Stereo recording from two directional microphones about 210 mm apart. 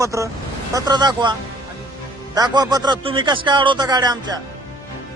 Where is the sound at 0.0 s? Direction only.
15° right (ahead or behind).